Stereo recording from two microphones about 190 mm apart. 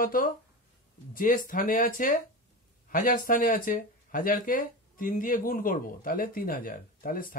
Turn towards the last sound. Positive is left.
turn(degrees=45)  # may be behind; listen again after turning